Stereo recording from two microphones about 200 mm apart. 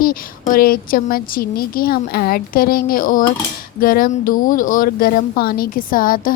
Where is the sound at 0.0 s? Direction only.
45° left (ahead or behind).